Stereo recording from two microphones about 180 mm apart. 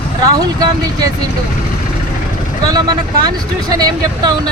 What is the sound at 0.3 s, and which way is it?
Speech, 20° right (ahead or behind).